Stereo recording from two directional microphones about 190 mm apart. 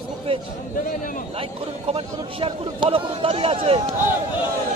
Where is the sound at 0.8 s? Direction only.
45° left (ahead or behind).